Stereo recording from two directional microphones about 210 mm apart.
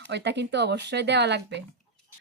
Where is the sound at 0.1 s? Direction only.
55° right (ahead or behind).